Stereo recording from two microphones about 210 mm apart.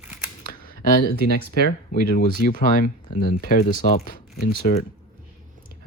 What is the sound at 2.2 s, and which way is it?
Speech, 40° left (ahead or behind).